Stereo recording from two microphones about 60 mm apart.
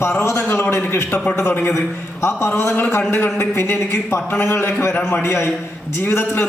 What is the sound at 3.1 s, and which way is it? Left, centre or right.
A man's voice, left.